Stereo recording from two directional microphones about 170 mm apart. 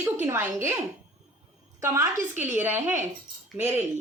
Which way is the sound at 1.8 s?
15° right (ahead or behind).